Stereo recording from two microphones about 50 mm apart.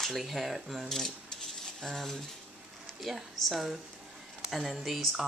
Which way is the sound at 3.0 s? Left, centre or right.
Centre.